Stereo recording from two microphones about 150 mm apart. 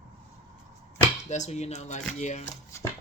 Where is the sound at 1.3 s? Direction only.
50° left (ahead or behind).